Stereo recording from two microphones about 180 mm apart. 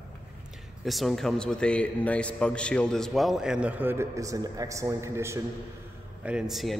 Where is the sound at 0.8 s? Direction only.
Centre (ahead or behind).